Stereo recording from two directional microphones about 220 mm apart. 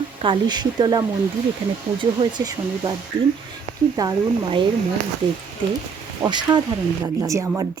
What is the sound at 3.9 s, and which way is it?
Speech, 20° right (ahead or behind).